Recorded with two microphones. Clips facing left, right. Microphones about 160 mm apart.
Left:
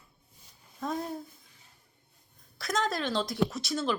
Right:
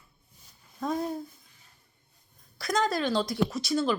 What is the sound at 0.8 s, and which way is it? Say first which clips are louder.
Speech: right 3 dB; centre (ahead or behind).